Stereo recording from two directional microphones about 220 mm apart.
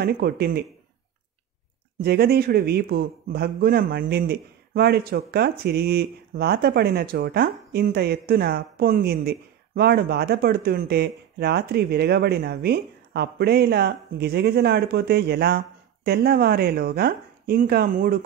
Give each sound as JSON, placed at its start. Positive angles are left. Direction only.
{"t": 0.0, "sound": "a man's voice", "side_deg": -45}
{"t": 2.0, "sound": "a man's voice", "side_deg": -45}